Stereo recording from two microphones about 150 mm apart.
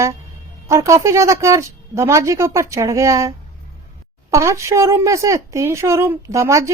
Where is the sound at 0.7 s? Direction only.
20° right (ahead or behind).